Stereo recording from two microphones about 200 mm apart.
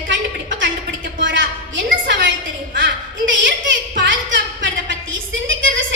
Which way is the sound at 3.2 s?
65° right (ahead or behind).